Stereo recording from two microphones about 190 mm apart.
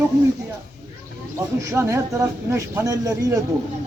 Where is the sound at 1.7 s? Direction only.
15° right (ahead or behind).